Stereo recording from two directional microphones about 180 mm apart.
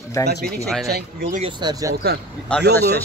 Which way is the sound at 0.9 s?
60° right (ahead or behind).